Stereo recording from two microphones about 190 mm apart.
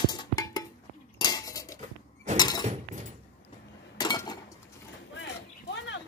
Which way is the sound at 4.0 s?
20° left (ahead or behind).